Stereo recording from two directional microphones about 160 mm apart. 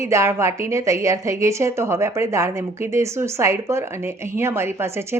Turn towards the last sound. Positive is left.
turn(degrees=-15)  # may be behind; listen again after turning